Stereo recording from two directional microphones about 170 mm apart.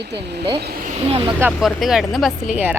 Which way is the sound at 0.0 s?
75° right (ahead or behind).